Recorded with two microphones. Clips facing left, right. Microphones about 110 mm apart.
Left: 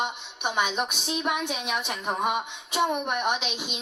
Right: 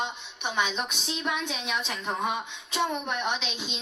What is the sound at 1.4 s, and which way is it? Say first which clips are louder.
Speech: left 3 dB; 55° left (ahead or behind).